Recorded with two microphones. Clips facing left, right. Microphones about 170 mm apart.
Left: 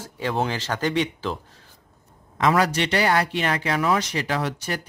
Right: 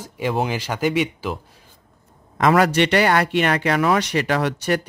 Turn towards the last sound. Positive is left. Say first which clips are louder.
# right 6 dB
turn(degrees=-70)  # may be behind; listen again after turning